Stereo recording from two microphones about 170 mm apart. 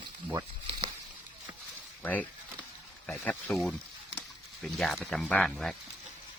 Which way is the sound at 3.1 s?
10° left (ahead or behind).